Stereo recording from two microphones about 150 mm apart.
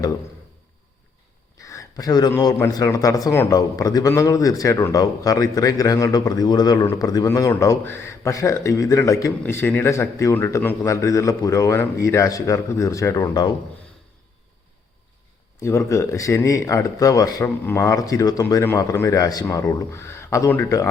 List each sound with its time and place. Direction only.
1.6 s a sound: 20° left (ahead or behind)
2.4 s speech: 25° left (ahead or behind)
15.9 s speech: 20° left (ahead or behind)